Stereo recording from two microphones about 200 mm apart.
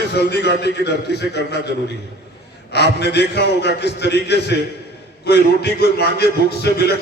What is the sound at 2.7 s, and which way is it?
A man's voice, 55° left (ahead or behind).